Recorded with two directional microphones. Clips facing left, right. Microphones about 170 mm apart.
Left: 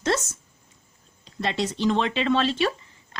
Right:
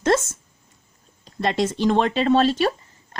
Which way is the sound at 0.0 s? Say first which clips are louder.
Right 5 dB; 50° right (ahead or behind).